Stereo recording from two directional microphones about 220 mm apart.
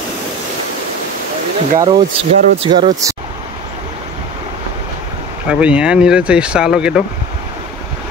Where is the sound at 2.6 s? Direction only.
20° right (ahead or behind).